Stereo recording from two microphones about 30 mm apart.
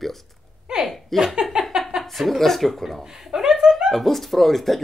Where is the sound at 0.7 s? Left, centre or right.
Right.